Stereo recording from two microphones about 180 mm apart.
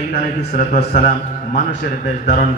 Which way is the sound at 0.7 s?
50° left (ahead or behind).